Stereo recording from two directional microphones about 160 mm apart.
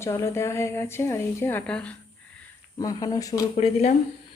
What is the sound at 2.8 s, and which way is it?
Speech, 25° left (ahead or behind).